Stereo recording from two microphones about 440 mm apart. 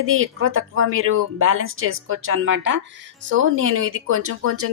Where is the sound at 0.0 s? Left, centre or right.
Right.